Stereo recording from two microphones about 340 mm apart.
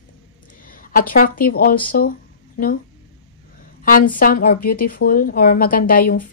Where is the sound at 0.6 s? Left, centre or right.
Left.